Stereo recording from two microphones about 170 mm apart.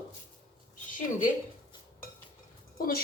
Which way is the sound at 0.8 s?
50° left (ahead or behind).